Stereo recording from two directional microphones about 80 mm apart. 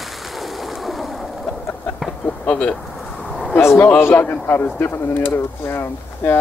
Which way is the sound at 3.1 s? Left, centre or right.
Centre.